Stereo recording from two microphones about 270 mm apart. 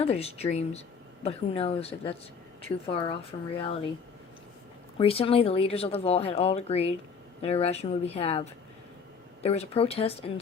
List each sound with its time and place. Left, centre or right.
0.0 s speech: left
4.9 s speech: centre